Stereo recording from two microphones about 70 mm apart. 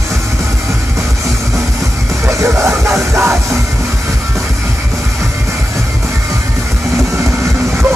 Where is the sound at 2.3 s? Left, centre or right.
Right.